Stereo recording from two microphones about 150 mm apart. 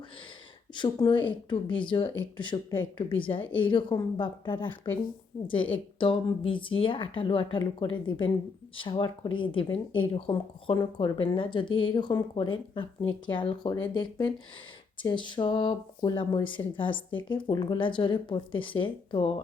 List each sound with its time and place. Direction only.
0.7 s speech: 30° left (ahead or behind)
6.0 s speech: 35° left (ahead or behind)